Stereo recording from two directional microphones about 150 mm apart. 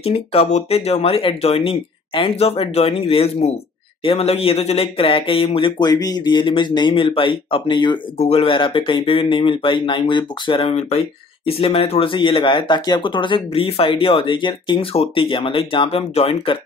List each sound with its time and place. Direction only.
0.0 s speech: 45° left (ahead or behind)